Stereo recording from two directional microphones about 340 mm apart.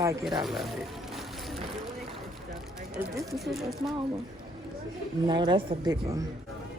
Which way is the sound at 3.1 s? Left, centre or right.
Centre.